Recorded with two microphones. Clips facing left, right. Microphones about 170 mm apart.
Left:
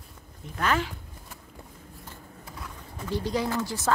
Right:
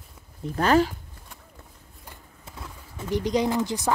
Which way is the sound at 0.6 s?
35° right (ahead or behind).